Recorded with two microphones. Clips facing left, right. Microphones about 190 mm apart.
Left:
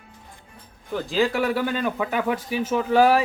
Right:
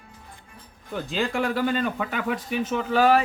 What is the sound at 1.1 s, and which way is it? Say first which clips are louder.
Speech: left 4 dB; centre (ahead or behind).